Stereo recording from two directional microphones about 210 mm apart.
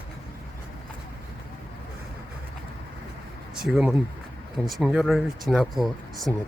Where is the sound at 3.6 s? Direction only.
5° right (ahead or behind).